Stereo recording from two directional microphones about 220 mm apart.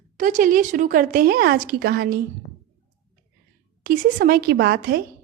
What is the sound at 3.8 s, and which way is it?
Speech, 40° right (ahead or behind).